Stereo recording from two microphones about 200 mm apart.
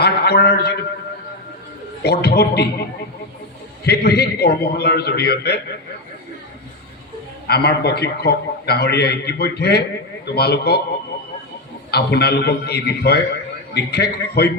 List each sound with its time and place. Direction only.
0.0 s a sound: 55° left (ahead or behind)
2.0 s a man's voice: 55° left (ahead or behind)
3.8 s a man's voice: 55° left (ahead or behind)
7.4 s a man's voice: 55° left (ahead or behind)
11.9 s a man's voice: 55° left (ahead or behind)